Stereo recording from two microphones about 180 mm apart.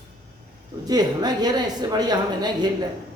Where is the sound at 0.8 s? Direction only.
20° right (ahead or behind).